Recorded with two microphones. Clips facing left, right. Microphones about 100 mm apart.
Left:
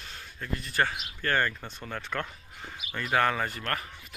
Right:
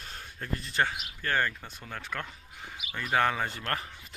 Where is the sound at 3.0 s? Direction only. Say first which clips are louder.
Left 1 dB; 10° right (ahead or behind).